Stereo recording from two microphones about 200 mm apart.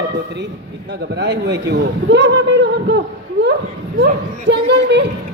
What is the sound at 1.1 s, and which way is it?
A woman's voice, 60° right (ahead or behind).